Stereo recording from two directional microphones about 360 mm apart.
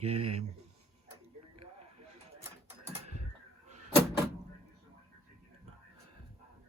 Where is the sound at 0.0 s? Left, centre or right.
Right.